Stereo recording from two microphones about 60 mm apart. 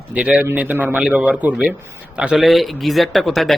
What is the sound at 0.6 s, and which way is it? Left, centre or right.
Speech, right.